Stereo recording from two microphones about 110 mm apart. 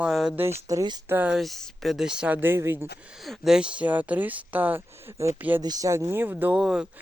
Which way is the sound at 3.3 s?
5° right (ahead or behind).